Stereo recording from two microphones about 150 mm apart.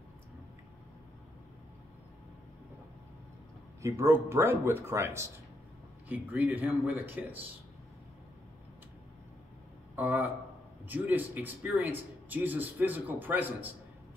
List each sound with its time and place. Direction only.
3.8 s a man's voice: 20° right (ahead or behind)
9.9 s a man's voice: 10° right (ahead or behind)